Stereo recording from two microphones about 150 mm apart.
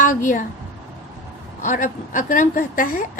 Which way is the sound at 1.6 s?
60° left (ahead or behind).